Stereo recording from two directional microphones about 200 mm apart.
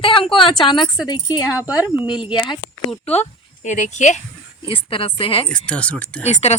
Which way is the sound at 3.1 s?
35° left (ahead or behind).